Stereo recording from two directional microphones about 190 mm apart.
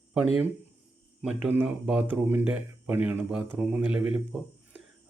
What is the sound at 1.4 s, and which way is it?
Speech, 5° right (ahead or behind).